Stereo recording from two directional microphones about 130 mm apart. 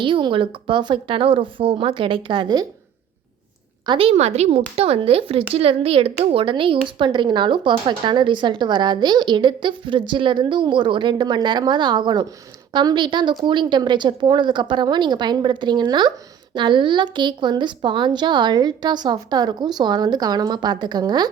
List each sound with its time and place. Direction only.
0.0 s a woman's voice: 40° right (ahead or behind)
3.8 s a woman's voice: 45° right (ahead or behind)